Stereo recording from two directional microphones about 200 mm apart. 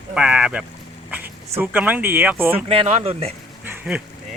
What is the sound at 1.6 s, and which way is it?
Speech, 10° right (ahead or behind).